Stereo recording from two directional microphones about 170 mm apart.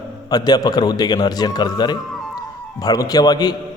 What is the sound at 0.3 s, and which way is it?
A man's voice, 25° left (ahead or behind).